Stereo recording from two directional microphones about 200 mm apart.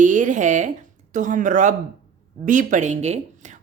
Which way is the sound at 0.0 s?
40° right (ahead or behind).